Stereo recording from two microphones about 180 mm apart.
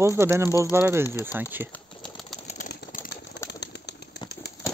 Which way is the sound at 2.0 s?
5° left (ahead or behind).